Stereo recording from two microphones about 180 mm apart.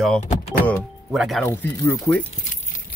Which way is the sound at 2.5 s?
45° left (ahead or behind).